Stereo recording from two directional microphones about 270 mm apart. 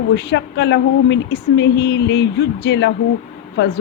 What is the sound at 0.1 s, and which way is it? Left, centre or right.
Speech, left.